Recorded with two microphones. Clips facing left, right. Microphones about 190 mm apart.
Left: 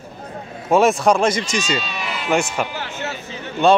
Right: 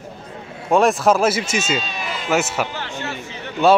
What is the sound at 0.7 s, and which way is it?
Speech, centre (ahead or behind).